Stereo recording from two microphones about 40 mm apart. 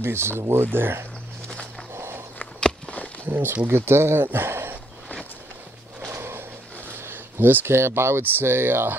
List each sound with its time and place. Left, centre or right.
0.0 s speech: right
0.7 s speech: right
2.0 s walk: right
3.3 s speech: right
3.7 s speech: right
6.1 s a sound: right
7.0 s speech: right